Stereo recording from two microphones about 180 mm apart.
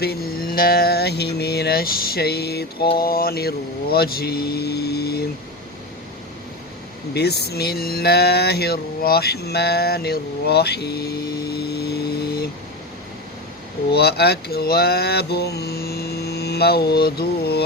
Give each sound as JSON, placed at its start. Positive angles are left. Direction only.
{"t": 0.0, "sound": "mantra", "side_deg": 60}
{"t": 7.1, "sound": "mantra", "side_deg": 65}
{"t": 13.9, "sound": "speech", "side_deg": 65}